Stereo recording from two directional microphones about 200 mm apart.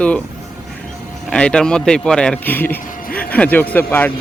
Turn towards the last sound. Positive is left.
turn(degrees=10)  # may be behind; listen again after turning